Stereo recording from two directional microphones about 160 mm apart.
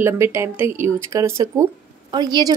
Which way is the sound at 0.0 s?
15° right (ahead or behind).